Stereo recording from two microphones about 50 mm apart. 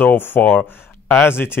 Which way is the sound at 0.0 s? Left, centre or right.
Left.